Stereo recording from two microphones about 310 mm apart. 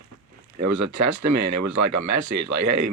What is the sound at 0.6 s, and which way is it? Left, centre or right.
Speech, right.